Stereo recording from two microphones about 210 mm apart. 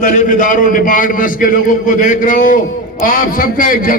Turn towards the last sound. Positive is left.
turn(degrees=40)  # may be behind; listen again after turning